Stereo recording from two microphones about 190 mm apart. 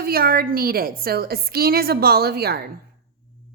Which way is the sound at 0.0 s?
50° right (ahead or behind).